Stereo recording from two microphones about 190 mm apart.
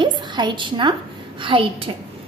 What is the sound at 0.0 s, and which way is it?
A woman's voice, 25° right (ahead or behind).